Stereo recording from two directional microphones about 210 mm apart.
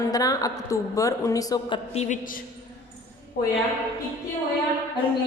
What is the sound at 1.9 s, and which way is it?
A woman's voice, 35° left (ahead or behind).